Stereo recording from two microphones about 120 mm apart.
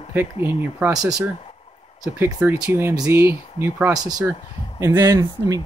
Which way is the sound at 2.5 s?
20° right (ahead or behind).